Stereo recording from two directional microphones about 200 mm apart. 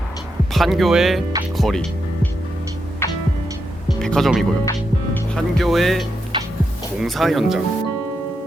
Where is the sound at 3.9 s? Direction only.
Centre (ahead or behind).